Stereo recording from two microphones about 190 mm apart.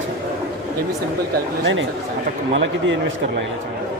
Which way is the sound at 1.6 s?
75° right (ahead or behind).